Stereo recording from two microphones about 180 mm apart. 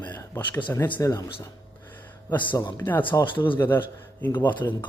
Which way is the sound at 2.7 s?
10° left (ahead or behind).